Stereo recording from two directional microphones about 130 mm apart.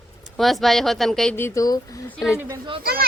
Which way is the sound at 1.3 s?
20° left (ahead or behind).